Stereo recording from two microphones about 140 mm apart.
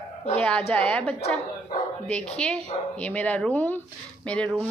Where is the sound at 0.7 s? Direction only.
10° left (ahead or behind).